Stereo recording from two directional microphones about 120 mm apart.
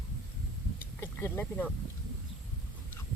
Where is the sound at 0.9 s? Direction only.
20° left (ahead or behind).